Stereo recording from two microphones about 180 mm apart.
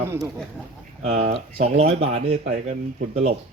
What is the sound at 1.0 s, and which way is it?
Speech, 35° right (ahead or behind).